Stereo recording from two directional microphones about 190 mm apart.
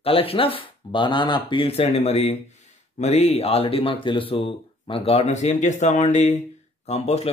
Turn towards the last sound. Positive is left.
turn(degrees=35)  # may be behind; listen again after turning